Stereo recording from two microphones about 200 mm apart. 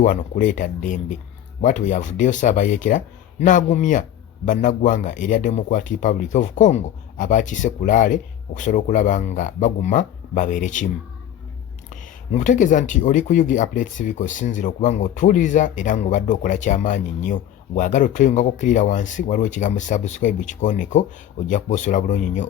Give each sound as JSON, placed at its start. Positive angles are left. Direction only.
{"t": 0.0, "sound": "speech", "side_deg": 40}
{"t": 11.9, "sound": "speech", "side_deg": 40}